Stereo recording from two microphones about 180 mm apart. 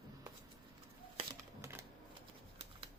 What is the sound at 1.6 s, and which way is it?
Typewriter, 15° right (ahead or behind).